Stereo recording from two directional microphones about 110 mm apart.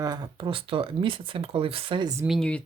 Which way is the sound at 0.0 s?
35° right (ahead or behind).